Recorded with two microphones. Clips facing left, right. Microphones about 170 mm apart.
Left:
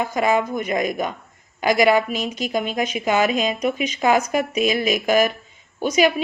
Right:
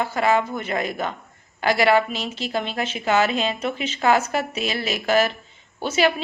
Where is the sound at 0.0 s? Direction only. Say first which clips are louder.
Left 1 dB; 15° left (ahead or behind).